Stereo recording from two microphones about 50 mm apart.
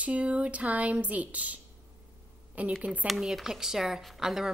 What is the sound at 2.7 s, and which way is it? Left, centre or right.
Speech, right.